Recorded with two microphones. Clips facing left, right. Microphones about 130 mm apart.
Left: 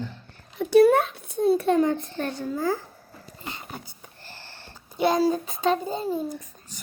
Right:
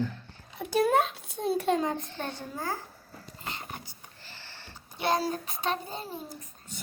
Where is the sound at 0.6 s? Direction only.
70° left (ahead or behind).